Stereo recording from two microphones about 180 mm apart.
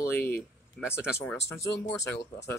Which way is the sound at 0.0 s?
15° left (ahead or behind).